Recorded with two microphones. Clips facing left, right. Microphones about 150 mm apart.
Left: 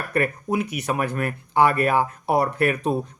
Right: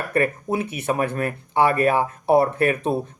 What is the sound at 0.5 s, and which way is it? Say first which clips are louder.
Speech: left 2 dB; 30° right (ahead or behind).